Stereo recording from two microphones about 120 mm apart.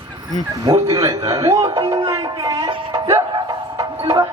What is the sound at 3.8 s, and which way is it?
Music, 35° right (ahead or behind).